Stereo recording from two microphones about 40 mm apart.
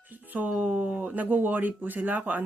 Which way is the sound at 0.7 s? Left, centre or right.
Right.